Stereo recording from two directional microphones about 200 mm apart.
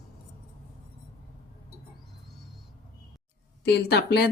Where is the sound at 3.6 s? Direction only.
55° left (ahead or behind).